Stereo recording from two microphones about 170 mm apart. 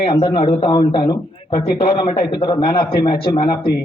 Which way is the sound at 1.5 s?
60° left (ahead or behind).